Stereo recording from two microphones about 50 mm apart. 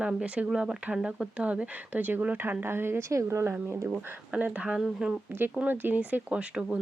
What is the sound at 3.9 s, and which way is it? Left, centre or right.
Speech, right.